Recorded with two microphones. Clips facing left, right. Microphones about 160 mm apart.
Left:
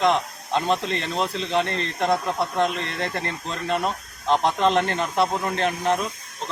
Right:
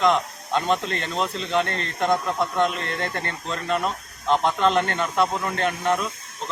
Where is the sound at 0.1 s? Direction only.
Centre (ahead or behind).